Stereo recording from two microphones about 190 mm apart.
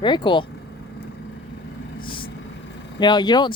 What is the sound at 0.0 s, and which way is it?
Speech, 25° left (ahead or behind).